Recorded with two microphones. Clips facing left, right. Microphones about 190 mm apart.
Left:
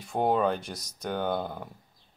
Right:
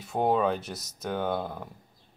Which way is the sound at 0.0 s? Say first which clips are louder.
Even; centre (ahead or behind).